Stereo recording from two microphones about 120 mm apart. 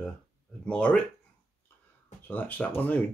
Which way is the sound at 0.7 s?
10° left (ahead or behind).